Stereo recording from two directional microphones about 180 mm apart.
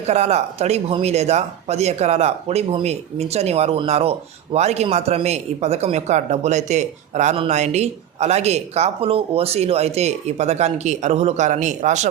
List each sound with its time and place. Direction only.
0.1 s speech: 35° right (ahead or behind)